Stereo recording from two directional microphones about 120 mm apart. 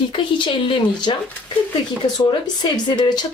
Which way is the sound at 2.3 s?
40° left (ahead or behind).